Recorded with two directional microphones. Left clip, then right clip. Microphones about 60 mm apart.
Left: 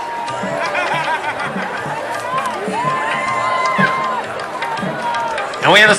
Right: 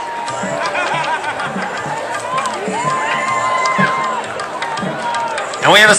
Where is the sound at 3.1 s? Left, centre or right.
Centre.